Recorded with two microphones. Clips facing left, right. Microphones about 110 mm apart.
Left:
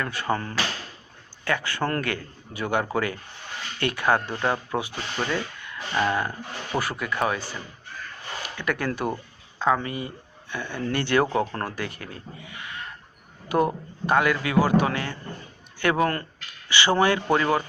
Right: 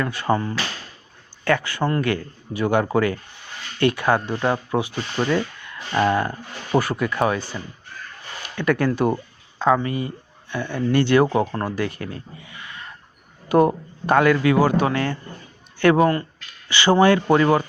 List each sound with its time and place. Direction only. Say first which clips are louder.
0.0 s speech: right 5 dB; 20° right (ahead or behind)
1.7 s speech: right 5 dB; 15° right (ahead or behind)
5.3 s a sound: right 6 dB; 30° right (ahead or behind)
6.0 s speech: right 5 dB; 20° right (ahead or behind)
8.6 s speech: right 8 dB; 35° right (ahead or behind)
8.9 s speech: right 7 dB; 25° right (ahead or behind)
13.5 s speech: right 6 dB; 30° right (ahead or behind)